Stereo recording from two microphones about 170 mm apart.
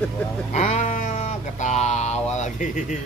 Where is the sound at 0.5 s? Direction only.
45° left (ahead or behind).